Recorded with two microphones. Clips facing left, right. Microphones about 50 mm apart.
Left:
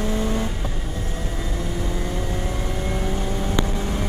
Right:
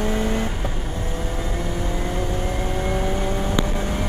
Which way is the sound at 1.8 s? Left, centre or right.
Right.